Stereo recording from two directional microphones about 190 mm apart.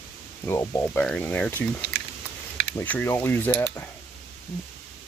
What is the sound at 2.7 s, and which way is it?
Speech, 10° left (ahead or behind).